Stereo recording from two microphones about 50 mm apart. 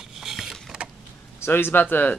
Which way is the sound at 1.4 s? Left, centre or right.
Left.